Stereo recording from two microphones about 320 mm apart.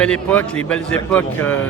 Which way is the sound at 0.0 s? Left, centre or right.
Centre.